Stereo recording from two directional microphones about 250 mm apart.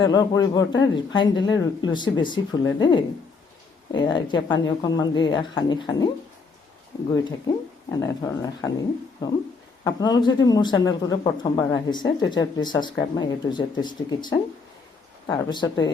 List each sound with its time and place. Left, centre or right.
0.0 s a woman's voice: centre
7.1 s speech: centre